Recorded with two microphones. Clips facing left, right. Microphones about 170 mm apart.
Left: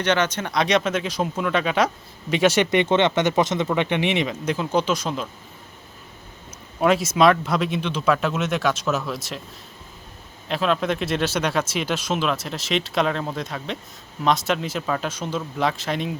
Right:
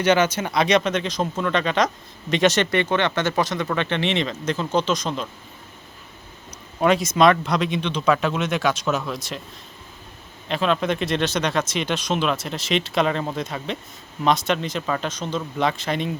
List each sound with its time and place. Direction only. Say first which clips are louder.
0.0 s speech: right 3 dB; 10° right (ahead or behind); by 2.6 s 10° left (ahead or behind)
2.6 s speech: left 3 dB; 20° left (ahead or behind); by 5.3 s 5° left (ahead or behind)
6.7 s speech: even; 5° left (ahead or behind)
10.5 s speech: even; centre (ahead or behind)